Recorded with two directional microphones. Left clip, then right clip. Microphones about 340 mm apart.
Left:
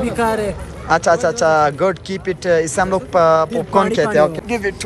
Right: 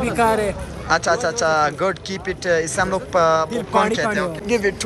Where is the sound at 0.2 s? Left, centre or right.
Centre.